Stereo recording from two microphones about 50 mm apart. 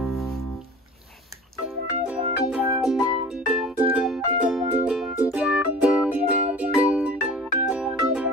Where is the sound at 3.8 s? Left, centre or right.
Right.